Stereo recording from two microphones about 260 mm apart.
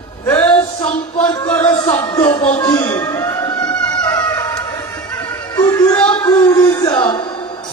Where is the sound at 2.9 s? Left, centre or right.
Centre.